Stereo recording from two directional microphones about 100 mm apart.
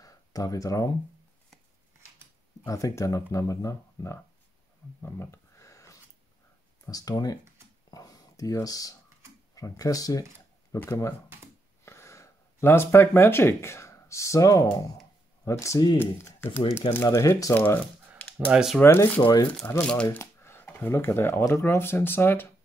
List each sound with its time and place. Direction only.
0.0 s speech: 35° left (ahead or behind)
2.6 s speech: 35° left (ahead or behind)
5.0 s a sound: 25° left (ahead or behind)
6.9 s speech: 40° left (ahead or behind)
7.9 s a sound: 35° left (ahead or behind)
9.6 s speech: 35° left (ahead or behind)
17.6 s crumpling: 20° left (ahead or behind)
18.5 s speech: 5° right (ahead or behind)
18.8 s speech: 20° left (ahead or behind)
19.8 s speech: 10° left (ahead or behind)
20.2 s a sound: 20° left (ahead or behind)
20.9 s speech: 25° left (ahead or behind)